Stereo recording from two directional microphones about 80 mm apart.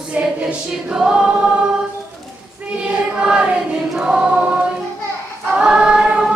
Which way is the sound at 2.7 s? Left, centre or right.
Centre.